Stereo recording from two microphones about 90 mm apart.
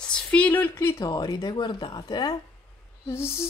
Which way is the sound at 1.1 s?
45° left (ahead or behind).